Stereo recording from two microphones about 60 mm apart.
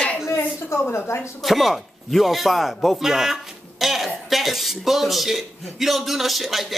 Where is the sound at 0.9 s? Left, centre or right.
Left.